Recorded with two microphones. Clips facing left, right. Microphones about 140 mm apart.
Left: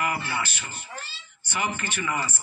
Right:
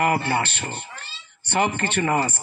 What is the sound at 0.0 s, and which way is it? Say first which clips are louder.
Speech: right 7 dB; 55° right (ahead or behind).